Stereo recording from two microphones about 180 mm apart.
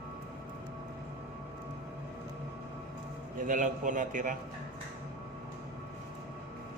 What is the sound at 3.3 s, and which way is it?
A man's voice, 50° right (ahead or behind).